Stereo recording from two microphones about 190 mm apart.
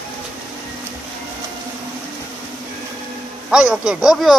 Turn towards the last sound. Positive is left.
turn(degrees=0)  # may be behind; listen again after turning